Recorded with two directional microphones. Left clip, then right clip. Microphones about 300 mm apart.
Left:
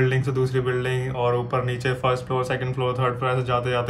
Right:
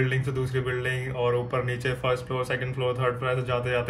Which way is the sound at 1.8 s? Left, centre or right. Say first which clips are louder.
Left 4 dB; centre.